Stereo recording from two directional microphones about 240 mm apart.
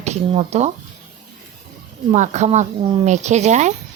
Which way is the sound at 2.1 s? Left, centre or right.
Right.